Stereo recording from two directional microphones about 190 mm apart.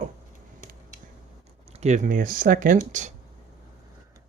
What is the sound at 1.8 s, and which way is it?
Speech, 40° right (ahead or behind).